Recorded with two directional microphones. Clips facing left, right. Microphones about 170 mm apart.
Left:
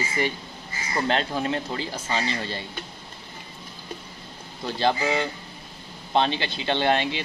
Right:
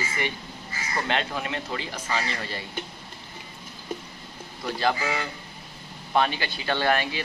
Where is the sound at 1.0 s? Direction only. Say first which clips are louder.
Left 5 dB; 35° left (ahead or behind).